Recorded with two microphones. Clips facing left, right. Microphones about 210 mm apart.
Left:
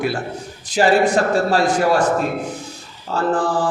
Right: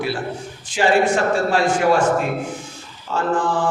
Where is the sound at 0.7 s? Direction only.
40° left (ahead or behind).